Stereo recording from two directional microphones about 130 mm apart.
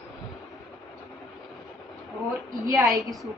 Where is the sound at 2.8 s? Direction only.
Centre (ahead or behind).